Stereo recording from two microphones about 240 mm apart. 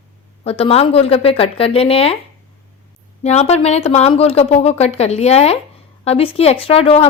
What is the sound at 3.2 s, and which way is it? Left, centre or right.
Speech, left.